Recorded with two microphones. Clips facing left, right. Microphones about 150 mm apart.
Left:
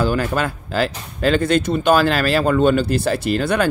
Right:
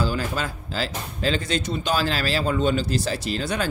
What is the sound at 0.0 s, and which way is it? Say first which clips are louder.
Speech: left 6 dB; 60° left (ahead or behind).